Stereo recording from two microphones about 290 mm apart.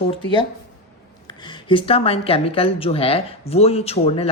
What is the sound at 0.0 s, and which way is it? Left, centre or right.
Speech, centre.